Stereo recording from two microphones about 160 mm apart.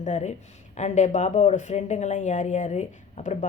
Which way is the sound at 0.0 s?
50° left (ahead or behind).